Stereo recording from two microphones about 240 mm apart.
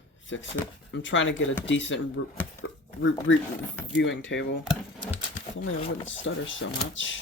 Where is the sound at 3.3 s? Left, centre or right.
Left.